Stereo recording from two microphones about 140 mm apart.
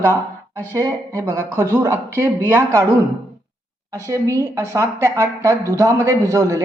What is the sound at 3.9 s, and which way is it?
A woman's voice, 20° right (ahead or behind).